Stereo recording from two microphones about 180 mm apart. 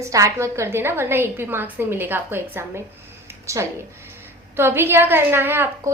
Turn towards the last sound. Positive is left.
turn(degrees=-10)  # may be behind; listen again after turning